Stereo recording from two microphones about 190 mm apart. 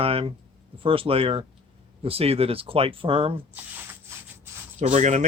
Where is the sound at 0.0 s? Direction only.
30° right (ahead or behind).